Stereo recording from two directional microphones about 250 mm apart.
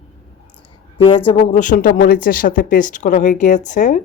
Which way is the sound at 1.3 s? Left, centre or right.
Left.